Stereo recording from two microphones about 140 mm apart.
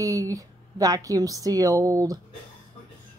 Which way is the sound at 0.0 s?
25° right (ahead or behind).